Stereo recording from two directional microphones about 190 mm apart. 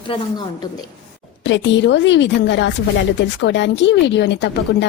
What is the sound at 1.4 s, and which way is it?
A woman's voice, 70° left (ahead or behind).